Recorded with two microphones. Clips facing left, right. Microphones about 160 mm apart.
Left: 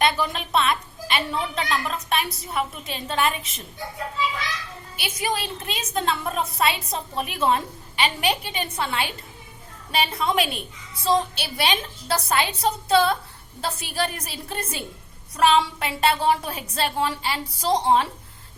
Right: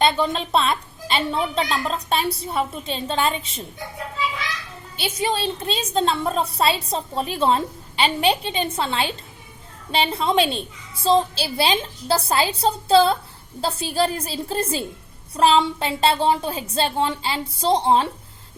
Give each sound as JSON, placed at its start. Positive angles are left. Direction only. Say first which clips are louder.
{"t": 0.0, "sound": "a woman's voice", "louder": "right 3 dB", "side_deg": -30}
{"t": 4.9, "sound": "a woman's voice", "louder": "right 4 dB", "side_deg": -30}